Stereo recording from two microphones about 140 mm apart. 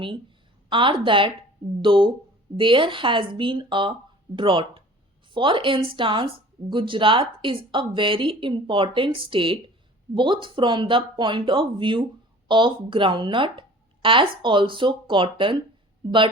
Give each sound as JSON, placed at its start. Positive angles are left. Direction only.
{"t": 0.7, "sound": "a woman's voice", "side_deg": -35}